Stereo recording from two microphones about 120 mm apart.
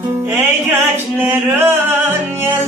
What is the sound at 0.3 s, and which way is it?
Mantra, 20° right (ahead or behind).